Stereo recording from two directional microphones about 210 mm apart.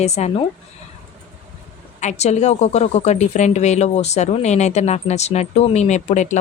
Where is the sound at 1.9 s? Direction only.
35° left (ahead or behind).